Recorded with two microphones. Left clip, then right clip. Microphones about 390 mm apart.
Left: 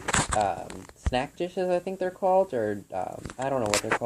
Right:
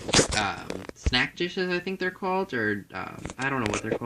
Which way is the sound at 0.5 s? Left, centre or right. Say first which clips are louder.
Right 2 dB; right.